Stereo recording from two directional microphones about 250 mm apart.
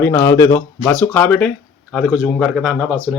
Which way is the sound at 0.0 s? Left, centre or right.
Centre.